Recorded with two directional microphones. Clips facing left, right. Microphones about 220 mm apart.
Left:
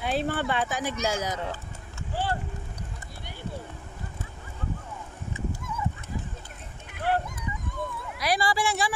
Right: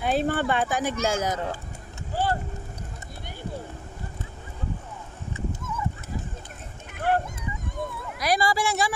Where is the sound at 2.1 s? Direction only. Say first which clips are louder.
Right 4 dB; 40° right (ahead or behind).